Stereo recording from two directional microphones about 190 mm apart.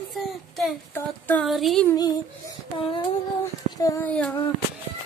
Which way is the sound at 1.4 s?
Centre (ahead or behind).